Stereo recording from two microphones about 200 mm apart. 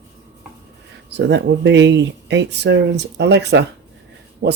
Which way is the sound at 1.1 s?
60° right (ahead or behind).